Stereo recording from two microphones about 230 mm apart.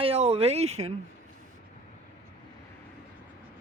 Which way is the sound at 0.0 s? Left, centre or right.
Right.